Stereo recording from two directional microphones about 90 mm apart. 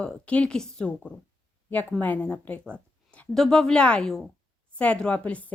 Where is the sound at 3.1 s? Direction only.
15° left (ahead or behind).